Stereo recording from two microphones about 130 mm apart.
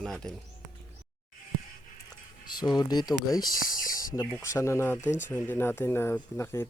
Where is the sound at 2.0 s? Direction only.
30° left (ahead or behind).